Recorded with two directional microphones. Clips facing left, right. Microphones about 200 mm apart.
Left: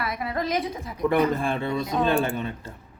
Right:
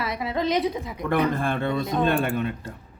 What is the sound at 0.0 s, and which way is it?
A woman's voice, 20° right (ahead or behind).